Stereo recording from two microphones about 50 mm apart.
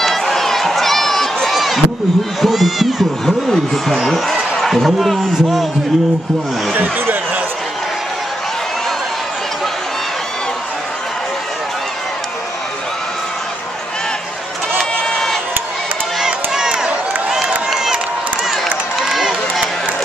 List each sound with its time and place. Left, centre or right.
0.0 s crowd: centre
2.4 s cat: centre
4.6 s a sound: centre
14.8 s a sound: centre
16.2 s run: centre
19.0 s run: centre